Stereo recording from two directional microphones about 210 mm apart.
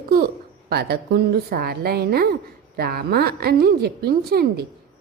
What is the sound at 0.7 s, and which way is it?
A woman's voice, 50° right (ahead or behind).